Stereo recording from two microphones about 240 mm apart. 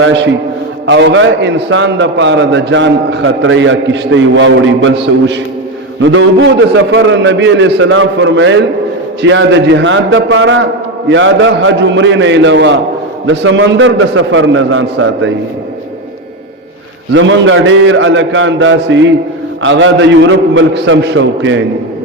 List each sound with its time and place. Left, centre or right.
0.0 s a man's voice: right
17.2 s a man's voice: right